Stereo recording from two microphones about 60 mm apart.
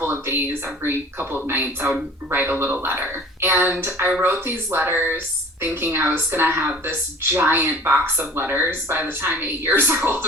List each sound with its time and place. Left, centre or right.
0.0 s a woman's voice: right